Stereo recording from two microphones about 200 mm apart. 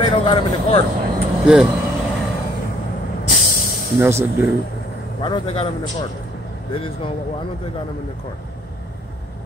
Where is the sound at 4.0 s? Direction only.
10° right (ahead or behind).